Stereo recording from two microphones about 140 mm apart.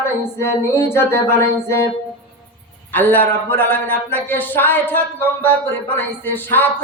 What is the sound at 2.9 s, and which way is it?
Music, 10° left (ahead or behind).